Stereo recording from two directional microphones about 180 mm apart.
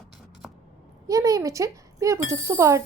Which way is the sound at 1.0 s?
20° right (ahead or behind).